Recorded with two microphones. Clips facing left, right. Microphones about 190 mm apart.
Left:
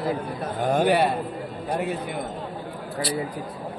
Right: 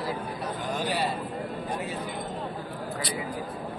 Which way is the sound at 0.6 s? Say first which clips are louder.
Left 10 dB; 55° left (ahead or behind).